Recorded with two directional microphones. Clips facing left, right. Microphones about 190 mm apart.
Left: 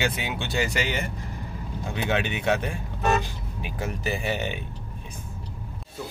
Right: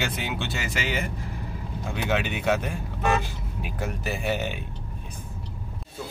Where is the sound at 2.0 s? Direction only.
5° right (ahead or behind).